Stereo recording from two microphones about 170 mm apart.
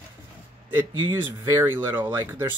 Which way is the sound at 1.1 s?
15° right (ahead or behind).